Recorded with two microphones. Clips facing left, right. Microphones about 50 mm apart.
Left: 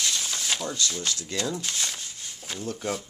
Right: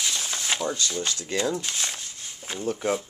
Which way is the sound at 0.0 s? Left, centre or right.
Centre.